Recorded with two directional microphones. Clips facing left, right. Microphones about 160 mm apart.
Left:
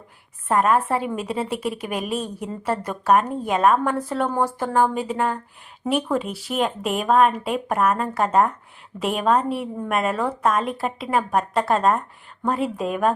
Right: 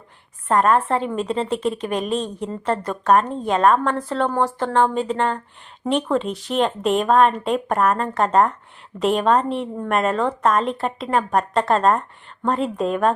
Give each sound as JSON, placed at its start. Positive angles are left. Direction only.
{"t": 0.4, "sound": "a woman's voice", "side_deg": 10}